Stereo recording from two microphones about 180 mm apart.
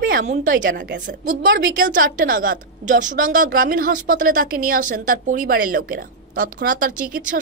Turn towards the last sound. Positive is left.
turn(degrees=-50)  # may be behind; listen again after turning